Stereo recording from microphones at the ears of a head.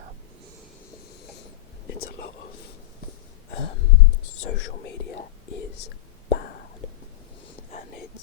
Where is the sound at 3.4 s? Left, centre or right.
Left.